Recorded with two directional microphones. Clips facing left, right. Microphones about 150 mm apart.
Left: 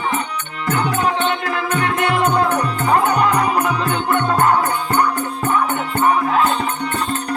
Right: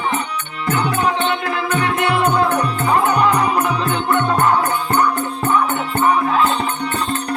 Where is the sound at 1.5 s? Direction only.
30° right (ahead or behind).